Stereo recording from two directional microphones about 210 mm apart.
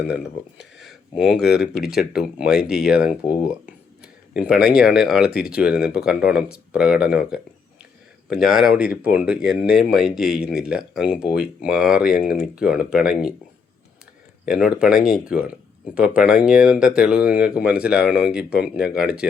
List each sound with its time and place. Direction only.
0.6 s a sound: centre (ahead or behind)
1.4 s speech: 50° left (ahead or behind)
1.6 s speech: 5° right (ahead or behind)
4.0 s a sound: 5° right (ahead or behind)
4.7 s speech: 5° right (ahead or behind)
14.4 s speech: 5° right (ahead or behind)